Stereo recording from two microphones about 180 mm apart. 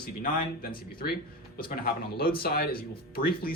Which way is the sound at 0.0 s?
55° left (ahead or behind).